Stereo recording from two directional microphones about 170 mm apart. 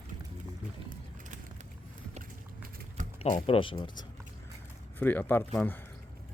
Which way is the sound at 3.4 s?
30° left (ahead or behind).